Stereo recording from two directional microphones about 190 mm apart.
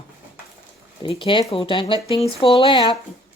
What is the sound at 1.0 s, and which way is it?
Speech, 25° left (ahead or behind).